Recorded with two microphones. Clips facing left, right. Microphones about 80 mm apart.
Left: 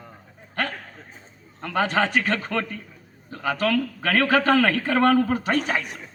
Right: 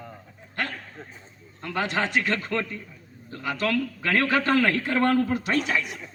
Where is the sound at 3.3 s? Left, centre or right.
Left.